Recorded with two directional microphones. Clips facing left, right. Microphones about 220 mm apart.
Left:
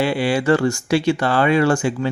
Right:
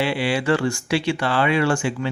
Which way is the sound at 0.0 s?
40° left (ahead or behind).